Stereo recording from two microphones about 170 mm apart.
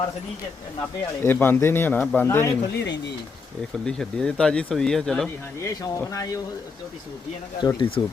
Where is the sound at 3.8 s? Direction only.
5° left (ahead or behind).